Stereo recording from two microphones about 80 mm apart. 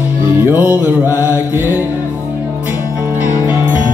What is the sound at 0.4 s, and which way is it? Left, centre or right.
Music, right.